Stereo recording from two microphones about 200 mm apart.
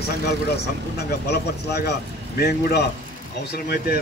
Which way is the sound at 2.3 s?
55° left (ahead or behind).